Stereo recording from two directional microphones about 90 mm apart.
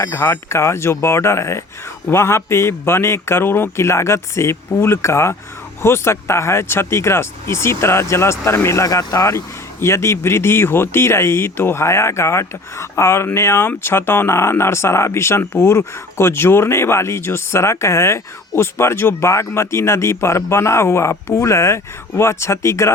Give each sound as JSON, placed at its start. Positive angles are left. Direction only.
{"t": 0.0, "sound": "speech", "side_deg": 30}